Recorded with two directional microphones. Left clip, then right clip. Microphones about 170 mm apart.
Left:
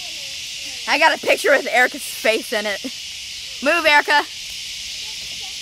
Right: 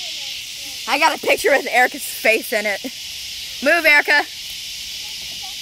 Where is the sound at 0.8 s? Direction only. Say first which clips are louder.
Left 1 dB; 15° left (ahead or behind).